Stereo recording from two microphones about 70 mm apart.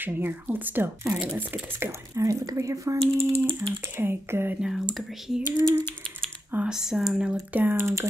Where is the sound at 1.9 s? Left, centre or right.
Right.